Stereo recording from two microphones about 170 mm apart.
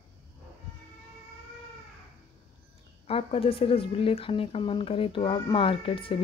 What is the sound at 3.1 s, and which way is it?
A woman's voice, 35° left (ahead or behind).